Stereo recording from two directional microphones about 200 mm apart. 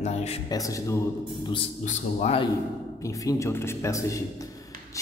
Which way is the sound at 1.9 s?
35° left (ahead or behind).